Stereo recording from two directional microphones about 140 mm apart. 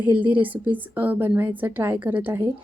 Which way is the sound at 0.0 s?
10° right (ahead or behind).